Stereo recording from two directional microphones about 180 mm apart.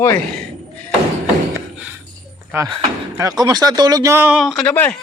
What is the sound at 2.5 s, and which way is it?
Speech, 15° right (ahead or behind).